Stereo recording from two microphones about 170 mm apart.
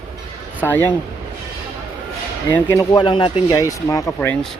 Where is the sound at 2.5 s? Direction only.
20° left (ahead or behind).